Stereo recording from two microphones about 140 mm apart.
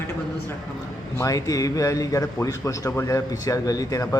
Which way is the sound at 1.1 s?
25° left (ahead or behind).